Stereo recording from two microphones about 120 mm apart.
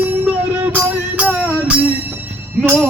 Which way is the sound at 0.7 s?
15° right (ahead or behind).